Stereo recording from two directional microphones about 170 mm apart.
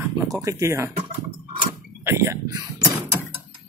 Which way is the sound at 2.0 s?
15° right (ahead or behind).